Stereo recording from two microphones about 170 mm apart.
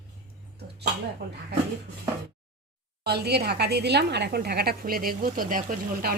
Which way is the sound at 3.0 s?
70° right (ahead or behind).